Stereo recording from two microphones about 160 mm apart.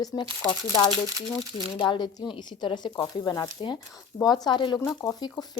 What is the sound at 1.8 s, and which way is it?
Speech, 30° left (ahead or behind).